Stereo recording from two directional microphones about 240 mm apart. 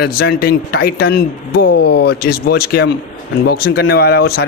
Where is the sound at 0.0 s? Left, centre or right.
Left.